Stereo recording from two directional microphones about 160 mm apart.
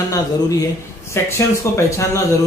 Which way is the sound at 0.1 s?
20° left (ahead or behind).